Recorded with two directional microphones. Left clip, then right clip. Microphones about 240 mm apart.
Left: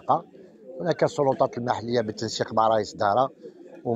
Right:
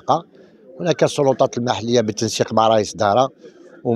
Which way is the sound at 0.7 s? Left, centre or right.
Right.